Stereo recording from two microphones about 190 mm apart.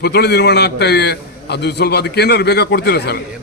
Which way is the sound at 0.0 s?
60° left (ahead or behind).